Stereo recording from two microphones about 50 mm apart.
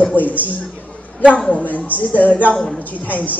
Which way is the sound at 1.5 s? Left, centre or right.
Left.